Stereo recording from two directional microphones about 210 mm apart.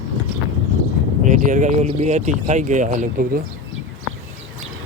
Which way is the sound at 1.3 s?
35° right (ahead or behind).